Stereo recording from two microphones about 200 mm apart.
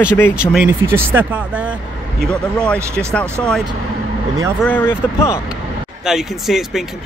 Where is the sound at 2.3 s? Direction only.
5° left (ahead or behind).